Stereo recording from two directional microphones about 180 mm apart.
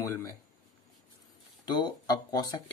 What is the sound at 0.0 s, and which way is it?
Speech, 15° left (ahead or behind).